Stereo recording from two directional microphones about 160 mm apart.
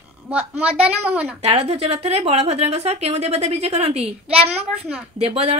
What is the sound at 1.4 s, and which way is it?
A woman's voice, 35° right (ahead or behind).